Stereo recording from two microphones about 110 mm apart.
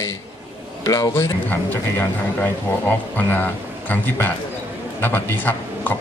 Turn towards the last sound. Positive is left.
turn(degrees=20)  # may be behind; listen again after turning